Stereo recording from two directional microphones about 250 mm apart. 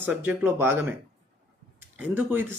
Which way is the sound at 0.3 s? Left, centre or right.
Centre.